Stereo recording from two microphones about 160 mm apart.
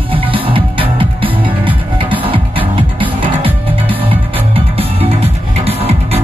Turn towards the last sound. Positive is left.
turn(degrees=-40)  # may be behind; listen again after turning